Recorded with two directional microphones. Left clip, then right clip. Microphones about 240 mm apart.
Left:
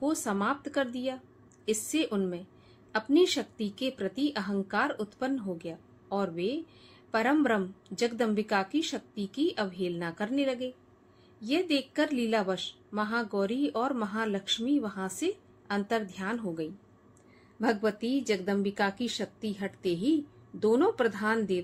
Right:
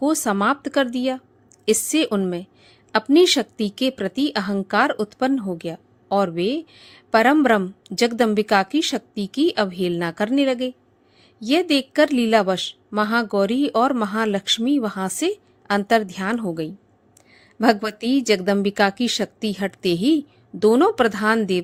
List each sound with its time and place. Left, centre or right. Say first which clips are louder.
0.0 s speech: right 10 dB; right